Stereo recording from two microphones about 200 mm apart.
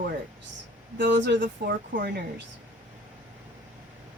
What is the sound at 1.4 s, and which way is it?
Speech, 40° right (ahead or behind).